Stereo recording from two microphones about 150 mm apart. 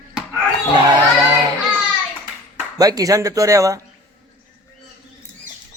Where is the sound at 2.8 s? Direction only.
25° right (ahead or behind).